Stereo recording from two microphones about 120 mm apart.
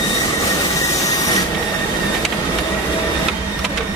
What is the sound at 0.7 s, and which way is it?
Train, 30° left (ahead or behind).